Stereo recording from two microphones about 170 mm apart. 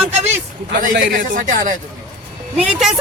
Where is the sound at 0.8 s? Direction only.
50° right (ahead or behind).